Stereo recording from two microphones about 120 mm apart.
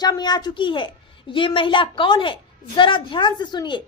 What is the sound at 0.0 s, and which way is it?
A woman's voice, 35° left (ahead or behind).